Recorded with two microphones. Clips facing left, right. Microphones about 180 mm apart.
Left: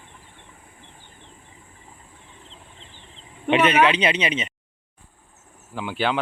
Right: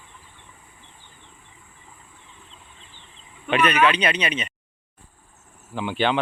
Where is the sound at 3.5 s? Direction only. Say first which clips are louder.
Left 2 dB; 25° left (ahead or behind).